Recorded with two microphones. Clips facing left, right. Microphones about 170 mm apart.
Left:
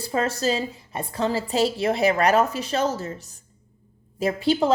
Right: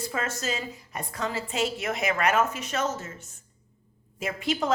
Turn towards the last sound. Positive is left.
turn(degrees=30)  # may be behind; listen again after turning